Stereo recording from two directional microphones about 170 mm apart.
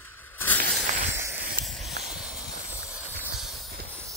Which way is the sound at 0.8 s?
45° right (ahead or behind).